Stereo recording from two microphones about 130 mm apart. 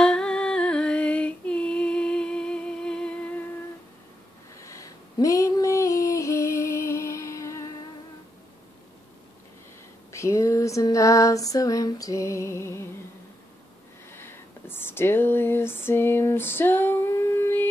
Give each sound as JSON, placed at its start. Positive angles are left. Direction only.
{"t": 0.0, "sound": "female singing", "side_deg": 5}
{"t": 4.6, "sound": "female singing", "side_deg": 25}
{"t": 10.1, "sound": "female singing", "side_deg": 20}
{"t": 14.1, "sound": "a sound", "side_deg": 15}